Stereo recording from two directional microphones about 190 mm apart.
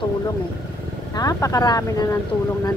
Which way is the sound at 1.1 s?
20° left (ahead or behind).